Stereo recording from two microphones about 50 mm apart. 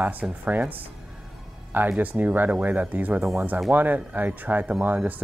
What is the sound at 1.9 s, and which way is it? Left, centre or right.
Speech, right.